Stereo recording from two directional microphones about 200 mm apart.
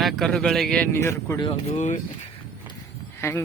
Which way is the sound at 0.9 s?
15° left (ahead or behind).